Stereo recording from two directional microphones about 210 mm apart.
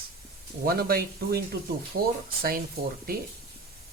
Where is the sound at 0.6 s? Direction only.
45° right (ahead or behind).